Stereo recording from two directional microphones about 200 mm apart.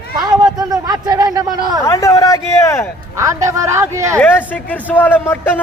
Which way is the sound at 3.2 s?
15° right (ahead or behind).